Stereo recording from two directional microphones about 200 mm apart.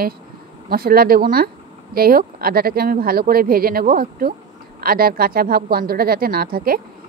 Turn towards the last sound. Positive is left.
turn(degrees=-50)  # may be behind; listen again after turning